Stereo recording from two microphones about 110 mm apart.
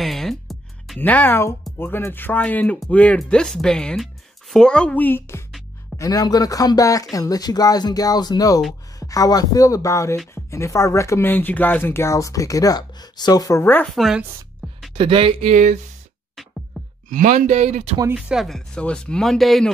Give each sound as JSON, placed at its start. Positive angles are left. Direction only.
{"t": 0.0, "sound": "music", "side_deg": 0}
{"t": 0.9, "sound": "speech", "side_deg": 15}
{"t": 5.9, "sound": "speech", "side_deg": 35}
{"t": 13.9, "sound": "speech", "side_deg": 0}
{"t": 15.0, "sound": "speech", "side_deg": -55}
{"t": 16.8, "sound": "music", "side_deg": 0}
{"t": 17.5, "sound": "speech", "side_deg": -90}
{"t": 18.1, "sound": "speech", "side_deg": -5}
{"t": 18.8, "sound": "speech", "side_deg": 10}